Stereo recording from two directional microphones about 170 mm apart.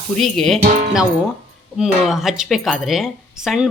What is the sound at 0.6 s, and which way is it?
Speech, 50° right (ahead or behind).